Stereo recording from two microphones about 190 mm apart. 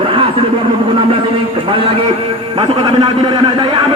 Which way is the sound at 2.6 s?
25° right (ahead or behind).